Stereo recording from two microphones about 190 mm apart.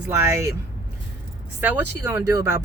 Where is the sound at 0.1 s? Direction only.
15° right (ahead or behind).